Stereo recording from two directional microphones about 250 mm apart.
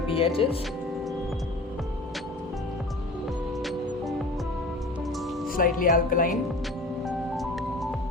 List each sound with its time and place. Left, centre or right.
0.1 s speech: left
3.6 s music: centre
5.5 s speech: left
7.0 s music: centre